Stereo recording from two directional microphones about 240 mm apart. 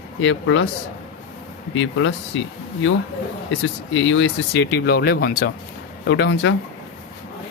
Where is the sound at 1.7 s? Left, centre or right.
Left.